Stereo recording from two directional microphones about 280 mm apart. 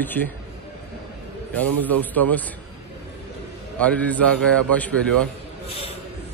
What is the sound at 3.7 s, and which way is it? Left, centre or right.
A man's voice, centre.